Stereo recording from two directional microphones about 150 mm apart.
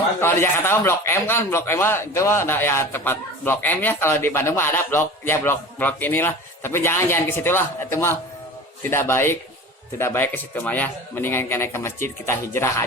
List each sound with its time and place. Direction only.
0.2 s speech: 15° left (ahead or behind)